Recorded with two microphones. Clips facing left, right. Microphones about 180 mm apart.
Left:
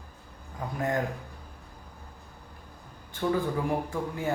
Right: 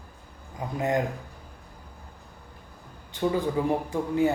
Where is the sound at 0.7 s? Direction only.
20° right (ahead or behind).